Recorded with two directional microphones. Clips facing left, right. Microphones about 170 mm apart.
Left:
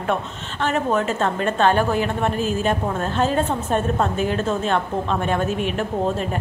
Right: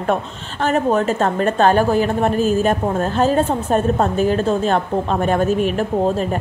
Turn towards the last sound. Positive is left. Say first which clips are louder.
# right 5 dB
turn(degrees=-40)  # may be behind; listen again after turning